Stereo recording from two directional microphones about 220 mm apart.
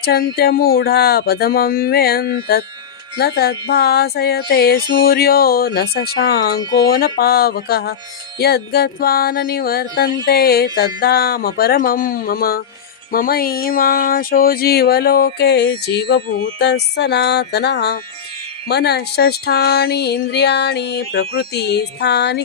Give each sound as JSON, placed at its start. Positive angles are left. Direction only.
{"t": 0.0, "sound": "speech", "side_deg": 45}